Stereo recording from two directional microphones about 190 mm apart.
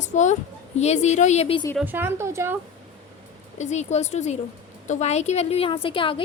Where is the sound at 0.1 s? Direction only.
40° left (ahead or behind).